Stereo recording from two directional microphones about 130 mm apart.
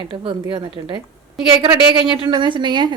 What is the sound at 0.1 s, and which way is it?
A woman's voice, 40° right (ahead or behind).